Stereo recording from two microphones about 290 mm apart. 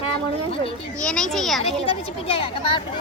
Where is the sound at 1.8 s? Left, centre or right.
Centre.